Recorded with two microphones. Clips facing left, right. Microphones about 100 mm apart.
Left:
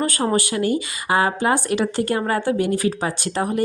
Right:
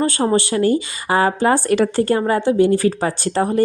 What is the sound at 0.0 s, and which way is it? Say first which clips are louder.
Speech: right 4 dB; 30° right (ahead or behind).